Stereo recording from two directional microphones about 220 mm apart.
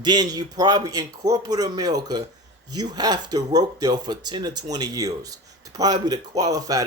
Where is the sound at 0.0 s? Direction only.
20° right (ahead or behind).